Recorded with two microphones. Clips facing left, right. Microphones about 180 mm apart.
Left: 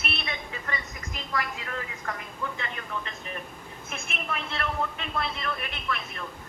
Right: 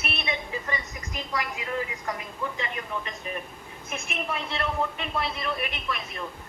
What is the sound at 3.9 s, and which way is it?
Speech, 15° right (ahead or behind).